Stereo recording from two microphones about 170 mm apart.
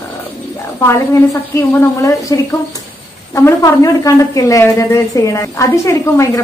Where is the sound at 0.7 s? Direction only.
15° left (ahead or behind).